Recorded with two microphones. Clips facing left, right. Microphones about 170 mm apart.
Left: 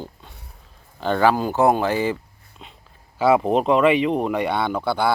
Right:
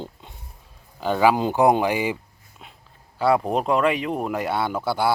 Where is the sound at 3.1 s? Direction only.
Centre (ahead or behind).